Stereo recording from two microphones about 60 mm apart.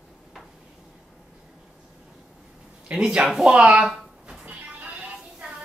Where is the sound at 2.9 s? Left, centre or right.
Centre.